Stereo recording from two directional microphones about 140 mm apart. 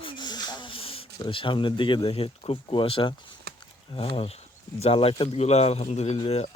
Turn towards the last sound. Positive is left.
turn(degrees=50)  # may be behind; listen again after turning